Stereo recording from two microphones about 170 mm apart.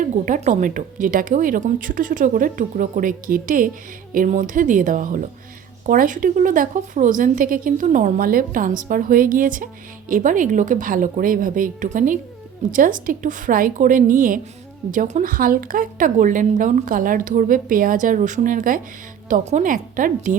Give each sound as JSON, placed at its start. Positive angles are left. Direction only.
{"t": 0.0, "sound": "a woman's voice", "side_deg": -45}